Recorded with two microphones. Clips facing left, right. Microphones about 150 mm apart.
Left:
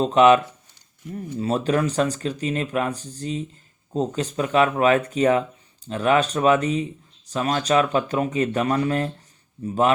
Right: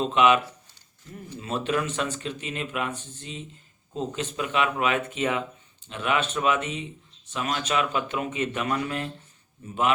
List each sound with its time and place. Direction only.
0.0 s speech: 40° left (ahead or behind)